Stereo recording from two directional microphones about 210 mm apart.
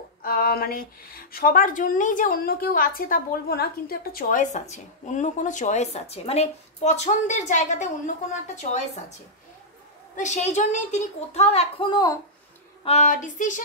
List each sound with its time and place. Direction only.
0.2 s speech: 45° left (ahead or behind)
10.1 s speech: 35° left (ahead or behind); by 12.2 s 20° left (ahead or behind)
12.8 s speech: 35° left (ahead or behind)